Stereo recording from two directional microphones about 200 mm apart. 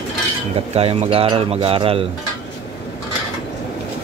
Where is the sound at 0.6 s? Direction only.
30° right (ahead or behind).